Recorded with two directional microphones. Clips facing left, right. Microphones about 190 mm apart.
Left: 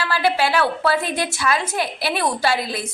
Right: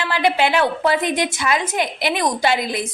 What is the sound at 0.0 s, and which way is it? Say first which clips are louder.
A woman's voice: right 2 dB; 20° right (ahead or behind).